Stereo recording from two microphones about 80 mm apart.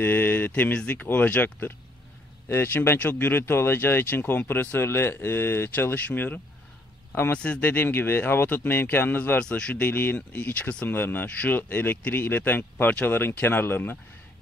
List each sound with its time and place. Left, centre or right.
0.0 s speech: left
9.4 s speech: centre
9.8 s speech: left